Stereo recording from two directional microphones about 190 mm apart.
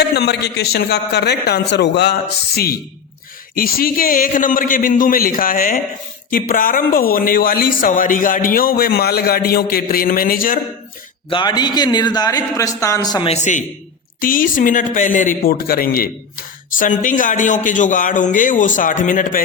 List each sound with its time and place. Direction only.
0.0 s a man's voice: 60° left (ahead or behind)
3.5 s speech: 50° left (ahead or behind)
11.3 s a man's voice: 25° left (ahead or behind)
13.3 s a man's voice: 40° left (ahead or behind)